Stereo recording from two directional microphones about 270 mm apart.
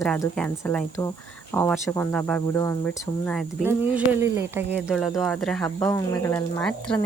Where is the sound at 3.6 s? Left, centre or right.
Centre.